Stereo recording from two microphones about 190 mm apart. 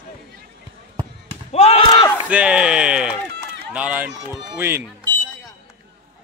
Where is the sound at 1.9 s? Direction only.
20° left (ahead or behind).